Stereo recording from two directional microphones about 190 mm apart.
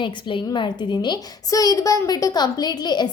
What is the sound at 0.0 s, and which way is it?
A woman's voice, 25° left (ahead or behind).